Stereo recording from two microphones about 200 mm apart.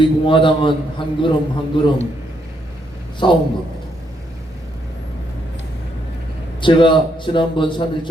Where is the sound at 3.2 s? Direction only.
25° left (ahead or behind).